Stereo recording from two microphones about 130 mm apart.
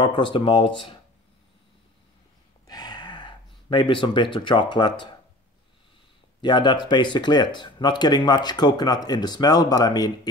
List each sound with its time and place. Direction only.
0.0 s speech: 40° left (ahead or behind)
2.6 s gasp: 30° left (ahead or behind)
6.4 s speech: 35° left (ahead or behind)